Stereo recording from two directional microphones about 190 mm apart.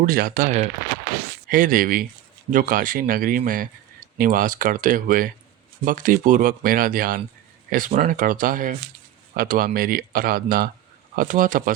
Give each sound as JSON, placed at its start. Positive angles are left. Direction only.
{"t": 0.0, "sound": "speech", "side_deg": -50}